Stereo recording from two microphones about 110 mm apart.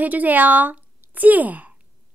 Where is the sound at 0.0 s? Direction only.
15° right (ahead or behind).